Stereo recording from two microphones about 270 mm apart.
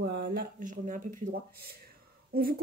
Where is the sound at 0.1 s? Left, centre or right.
Right.